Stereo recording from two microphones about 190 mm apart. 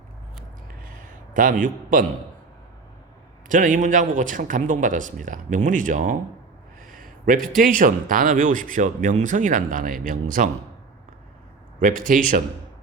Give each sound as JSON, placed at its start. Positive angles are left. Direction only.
{"t": 0.8, "sound": "a sound", "side_deg": -45}
{"t": 3.5, "sound": "a man's voice", "side_deg": -45}
{"t": 11.8, "sound": "a man's voice", "side_deg": -45}